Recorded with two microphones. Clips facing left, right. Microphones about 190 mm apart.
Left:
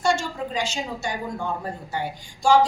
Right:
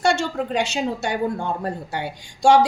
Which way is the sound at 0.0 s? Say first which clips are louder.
Right 3 dB; 70° right (ahead or behind).